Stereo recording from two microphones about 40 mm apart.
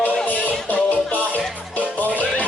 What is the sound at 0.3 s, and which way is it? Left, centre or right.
Music, left.